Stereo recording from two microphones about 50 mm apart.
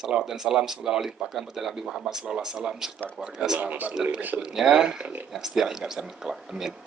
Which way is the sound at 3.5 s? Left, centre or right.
Right.